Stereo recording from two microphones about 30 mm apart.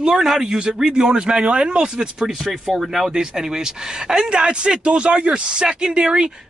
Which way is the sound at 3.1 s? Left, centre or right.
Right.